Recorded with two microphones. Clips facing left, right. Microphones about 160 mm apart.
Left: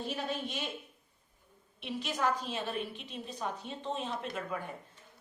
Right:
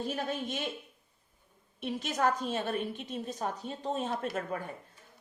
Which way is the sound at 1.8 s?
45° right (ahead or behind).